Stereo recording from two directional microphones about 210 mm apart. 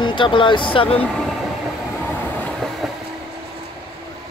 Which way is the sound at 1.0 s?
5° left (ahead or behind).